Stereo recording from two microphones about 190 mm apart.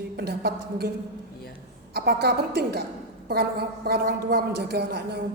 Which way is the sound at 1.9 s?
55° right (ahead or behind).